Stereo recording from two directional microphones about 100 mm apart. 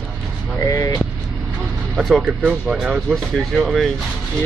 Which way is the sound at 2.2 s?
10° right (ahead or behind).